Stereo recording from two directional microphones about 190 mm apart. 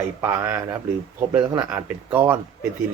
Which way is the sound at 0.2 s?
10° right (ahead or behind).